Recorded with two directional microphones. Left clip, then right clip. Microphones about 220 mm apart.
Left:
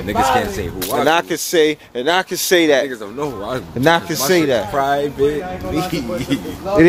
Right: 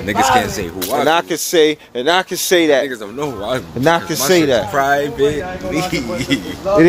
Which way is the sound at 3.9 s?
Centre (ahead or behind).